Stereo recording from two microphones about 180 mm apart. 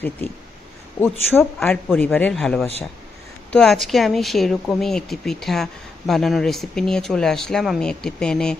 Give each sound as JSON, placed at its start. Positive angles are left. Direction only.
{"t": 1.3, "sound": "speech", "side_deg": 10}